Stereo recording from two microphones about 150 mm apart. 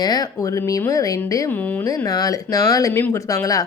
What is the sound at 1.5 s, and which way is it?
Speech, 10° left (ahead or behind).